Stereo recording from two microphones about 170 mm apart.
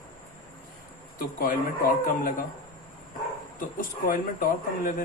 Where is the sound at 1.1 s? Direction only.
55° left (ahead or behind).